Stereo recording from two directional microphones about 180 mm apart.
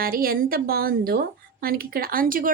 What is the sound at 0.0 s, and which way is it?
A woman's voice, 55° right (ahead or behind).